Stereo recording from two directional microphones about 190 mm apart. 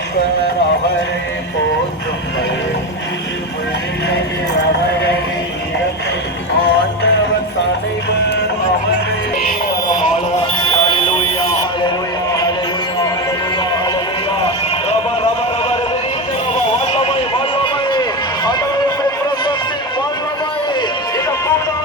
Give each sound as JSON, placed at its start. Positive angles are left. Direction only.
{"t": 9.4, "sound": "music", "side_deg": 45}
{"t": 10.7, "sound": "music", "side_deg": 25}
{"t": 12.3, "sound": "a sound", "side_deg": 20}
{"t": 17.6, "sound": "run", "side_deg": 25}